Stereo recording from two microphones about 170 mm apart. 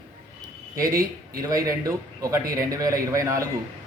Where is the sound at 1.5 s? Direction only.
20° right (ahead or behind).